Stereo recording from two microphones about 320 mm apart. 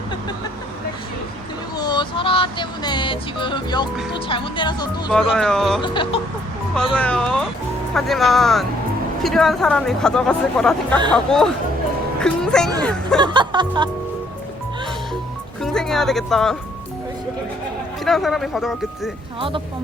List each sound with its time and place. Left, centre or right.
1.7 s a sound: centre
4.1 s speech: centre
5.3 s speech: centre
5.8 s speech: centre
6.9 s speech: centre
13.1 s music: centre
15.6 s speech: centre
18.0 s speech: centre
19.4 s music: centre